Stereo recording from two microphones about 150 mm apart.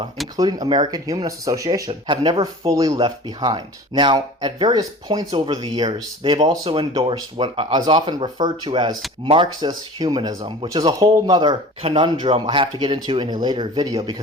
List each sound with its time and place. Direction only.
0.3 s speech: 25° right (ahead or behind)
1.9 s speech: 35° right (ahead or behind)